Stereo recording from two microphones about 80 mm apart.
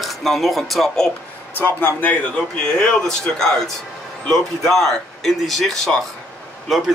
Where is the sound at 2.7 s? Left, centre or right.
Centre.